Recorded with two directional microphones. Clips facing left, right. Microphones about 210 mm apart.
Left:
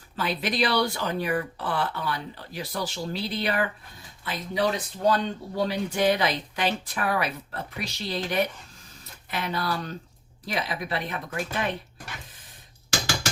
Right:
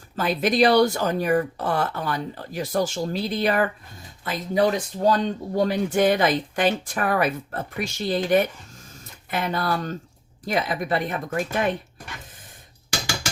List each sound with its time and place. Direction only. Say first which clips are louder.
0.2 s speech: right 7 dB; 45° right (ahead or behind)